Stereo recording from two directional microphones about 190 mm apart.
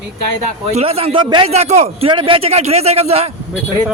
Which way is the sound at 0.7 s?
30° right (ahead or behind).